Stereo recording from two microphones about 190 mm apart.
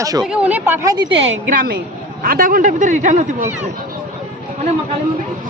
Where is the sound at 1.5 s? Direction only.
50° right (ahead or behind).